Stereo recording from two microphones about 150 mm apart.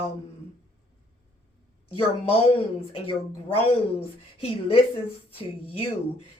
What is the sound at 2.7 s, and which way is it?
Speech, 35° left (ahead or behind).